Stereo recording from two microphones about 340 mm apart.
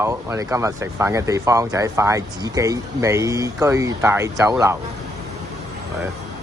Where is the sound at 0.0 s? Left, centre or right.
Centre.